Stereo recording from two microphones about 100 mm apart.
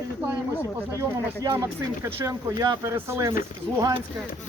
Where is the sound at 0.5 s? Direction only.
30° left (ahead or behind).